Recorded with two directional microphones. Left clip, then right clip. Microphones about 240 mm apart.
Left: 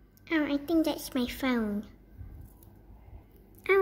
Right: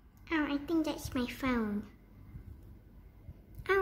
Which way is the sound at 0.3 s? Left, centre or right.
Centre.